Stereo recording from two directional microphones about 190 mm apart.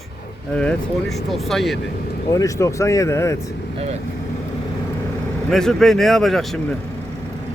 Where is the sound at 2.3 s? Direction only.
15° left (ahead or behind).